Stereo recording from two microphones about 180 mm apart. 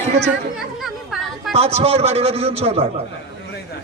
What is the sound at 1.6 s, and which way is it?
A man's voice, 35° right (ahead or behind).